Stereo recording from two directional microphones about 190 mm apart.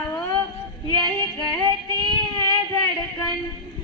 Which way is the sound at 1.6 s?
20° right (ahead or behind).